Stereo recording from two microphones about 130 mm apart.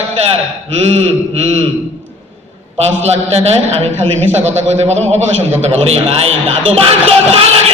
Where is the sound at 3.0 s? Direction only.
55° right (ahead or behind).